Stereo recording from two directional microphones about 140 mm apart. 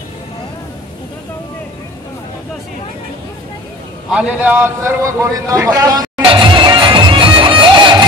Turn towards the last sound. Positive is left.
turn(degrees=-35)  # may be behind; listen again after turning